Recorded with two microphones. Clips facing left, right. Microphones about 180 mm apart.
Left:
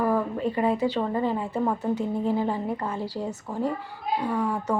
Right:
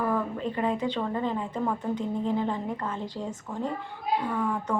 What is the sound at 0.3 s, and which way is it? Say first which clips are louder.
A woman's voice: left 4 dB; 10° left (ahead or behind).